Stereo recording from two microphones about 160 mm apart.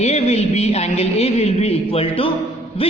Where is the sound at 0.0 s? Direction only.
40° left (ahead or behind).